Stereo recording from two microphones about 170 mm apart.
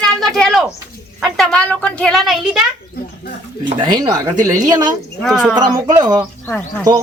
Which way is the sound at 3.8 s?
25° right (ahead or behind).